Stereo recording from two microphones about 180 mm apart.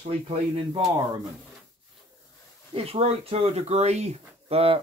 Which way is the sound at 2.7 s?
35° right (ahead or behind).